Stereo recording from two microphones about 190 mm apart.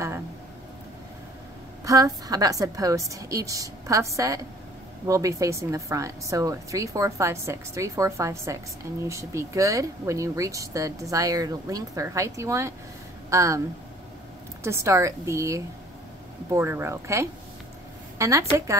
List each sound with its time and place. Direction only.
1.9 s speech: 20° right (ahead or behind)
14.6 s speech: 15° right (ahead or behind)
18.1 s a sound: 15° right (ahead or behind)